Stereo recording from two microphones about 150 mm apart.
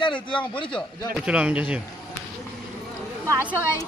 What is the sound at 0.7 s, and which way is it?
A man's voice, 5° right (ahead or behind).